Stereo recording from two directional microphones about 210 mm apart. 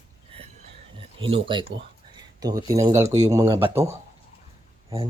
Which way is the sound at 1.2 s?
25° right (ahead or behind).